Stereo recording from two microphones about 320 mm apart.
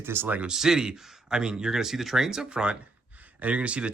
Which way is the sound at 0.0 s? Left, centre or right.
Centre.